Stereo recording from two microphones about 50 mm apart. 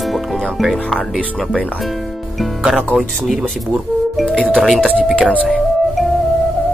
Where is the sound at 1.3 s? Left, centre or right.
Centre.